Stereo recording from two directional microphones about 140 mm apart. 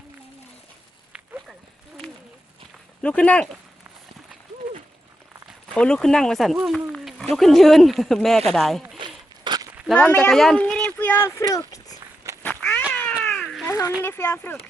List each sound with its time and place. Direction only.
1.1 s walk: 5° right (ahead or behind)
3.0 s speech: 10° left (ahead or behind)
5.5 s speech: 5° left (ahead or behind)
9.0 s zipper: 30° right (ahead or behind)
9.9 s speech: 10° left (ahead or behind)
12.4 s cat: 10° left (ahead or behind)
13.2 s baby cry: centre (ahead or behind)
13.7 s a sound: 20° left (ahead or behind)
14.0 s speech: 15° left (ahead or behind)